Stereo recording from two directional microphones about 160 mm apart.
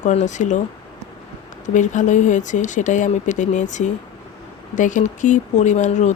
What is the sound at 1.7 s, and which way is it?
Speech, 50° left (ahead or behind).